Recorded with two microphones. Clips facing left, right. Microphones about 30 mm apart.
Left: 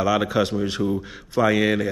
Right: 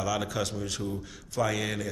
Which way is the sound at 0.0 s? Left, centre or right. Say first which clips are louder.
Left 10 dB; left.